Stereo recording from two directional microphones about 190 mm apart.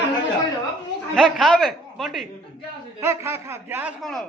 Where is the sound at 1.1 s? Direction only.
Centre (ahead or behind).